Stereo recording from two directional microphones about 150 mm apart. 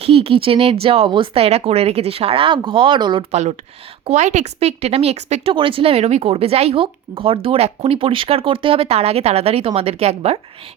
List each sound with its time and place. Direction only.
0.0 s speech: 40° right (ahead or behind)
4.0 s a woman's voice: 50° right (ahead or behind)